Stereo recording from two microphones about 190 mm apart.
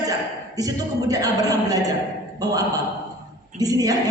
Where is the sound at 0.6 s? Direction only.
20° right (ahead or behind).